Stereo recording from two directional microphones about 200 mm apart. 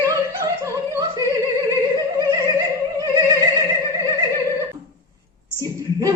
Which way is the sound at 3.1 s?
15° right (ahead or behind).